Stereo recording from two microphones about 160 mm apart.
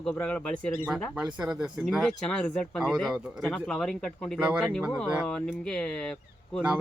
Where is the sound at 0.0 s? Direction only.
10° left (ahead or behind).